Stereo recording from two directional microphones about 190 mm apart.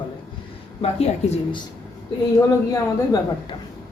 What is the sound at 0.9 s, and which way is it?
Speech, 35° left (ahead or behind).